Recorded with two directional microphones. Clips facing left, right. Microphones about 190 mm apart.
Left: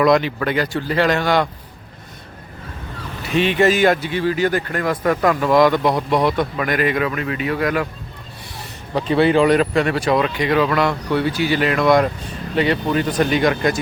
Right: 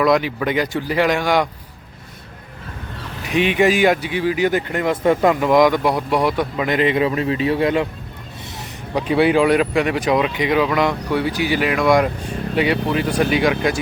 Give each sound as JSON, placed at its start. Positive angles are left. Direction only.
{"t": 0.0, "sound": "a man's voice", "side_deg": -5}
{"t": 3.2, "sound": "a man's voice", "side_deg": -15}
{"t": 6.7, "sound": "speech", "side_deg": -25}
{"t": 8.5, "sound": "a man's voice", "side_deg": -10}